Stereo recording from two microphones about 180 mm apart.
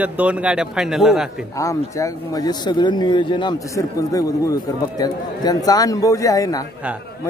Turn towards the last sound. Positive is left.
turn(degrees=20)  # may be behind; listen again after turning